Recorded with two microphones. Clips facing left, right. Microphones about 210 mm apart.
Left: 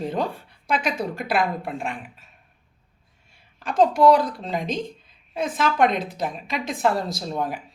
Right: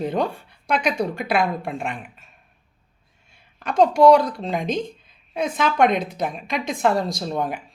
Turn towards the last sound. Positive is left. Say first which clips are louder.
# right 2 dB
turn(degrees=5)  # may be behind; listen again after turning